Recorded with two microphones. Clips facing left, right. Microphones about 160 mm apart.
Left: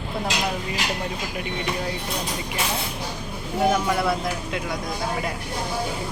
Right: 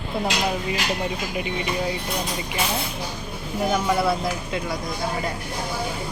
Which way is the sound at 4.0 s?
5° right (ahead or behind).